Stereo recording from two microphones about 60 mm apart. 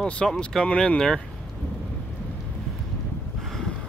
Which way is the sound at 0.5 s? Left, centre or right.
Centre.